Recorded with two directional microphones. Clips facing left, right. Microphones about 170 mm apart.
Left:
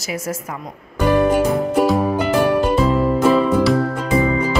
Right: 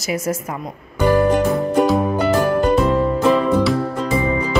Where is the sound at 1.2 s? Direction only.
5° left (ahead or behind).